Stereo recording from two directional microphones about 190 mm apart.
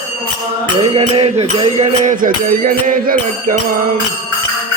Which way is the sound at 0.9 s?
35° right (ahead or behind).